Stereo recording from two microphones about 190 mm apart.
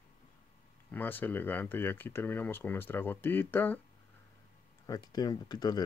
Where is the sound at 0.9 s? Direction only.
10° left (ahead or behind).